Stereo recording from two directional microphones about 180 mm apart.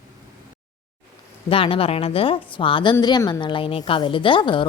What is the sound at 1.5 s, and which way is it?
A woman's voice, 30° left (ahead or behind).